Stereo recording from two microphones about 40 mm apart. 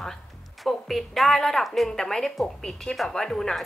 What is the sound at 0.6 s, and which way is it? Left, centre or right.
A woman's voice, centre.